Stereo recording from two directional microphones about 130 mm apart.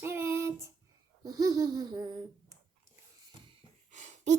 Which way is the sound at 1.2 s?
30° right (ahead or behind).